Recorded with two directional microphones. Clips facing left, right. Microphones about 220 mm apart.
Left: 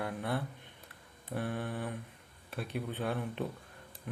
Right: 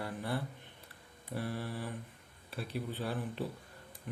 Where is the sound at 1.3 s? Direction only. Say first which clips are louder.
Left 2 dB; 55° left (ahead or behind).